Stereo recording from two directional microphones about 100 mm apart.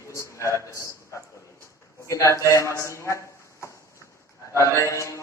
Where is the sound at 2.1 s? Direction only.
30° left (ahead or behind).